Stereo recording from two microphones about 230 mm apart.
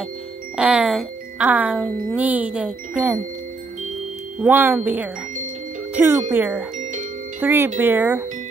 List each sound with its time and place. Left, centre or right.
0.6 s speech: centre
4.4 s speech: centre
6.8 s music: right
7.3 s speech: centre